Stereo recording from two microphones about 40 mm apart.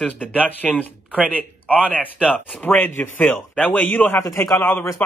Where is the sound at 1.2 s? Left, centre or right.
Right.